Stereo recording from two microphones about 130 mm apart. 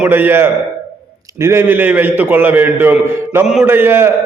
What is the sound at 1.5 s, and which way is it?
A man's voice, 15° right (ahead or behind).